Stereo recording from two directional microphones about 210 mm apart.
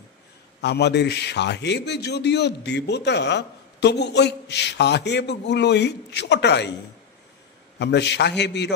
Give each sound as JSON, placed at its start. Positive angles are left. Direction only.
{"t": 0.6, "sound": "a man's voice", "side_deg": 55}
{"t": 7.8, "sound": "a man's voice", "side_deg": 55}